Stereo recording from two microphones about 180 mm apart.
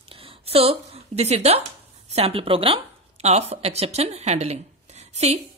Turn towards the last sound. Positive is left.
turn(degrees=-35)  # may be behind; listen again after turning